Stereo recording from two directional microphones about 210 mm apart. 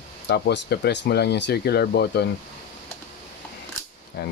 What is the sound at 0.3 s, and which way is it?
Speech, 50° left (ahead or behind).